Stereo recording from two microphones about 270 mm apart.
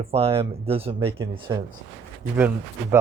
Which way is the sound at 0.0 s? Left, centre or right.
Right.